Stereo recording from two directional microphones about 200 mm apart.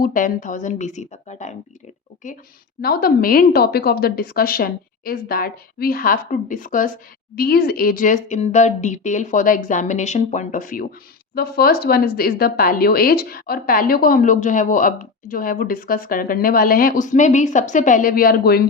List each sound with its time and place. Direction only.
0.0 s a woman's voice: 45° left (ahead or behind)